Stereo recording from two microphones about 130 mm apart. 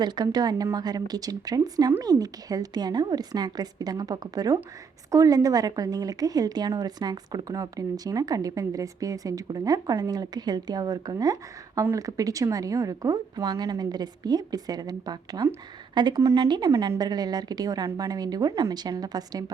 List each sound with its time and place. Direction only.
0.0 s a woman's voice: 30° right (ahead or behind)